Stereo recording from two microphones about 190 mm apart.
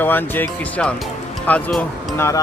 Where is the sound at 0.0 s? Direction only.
10° left (ahead or behind).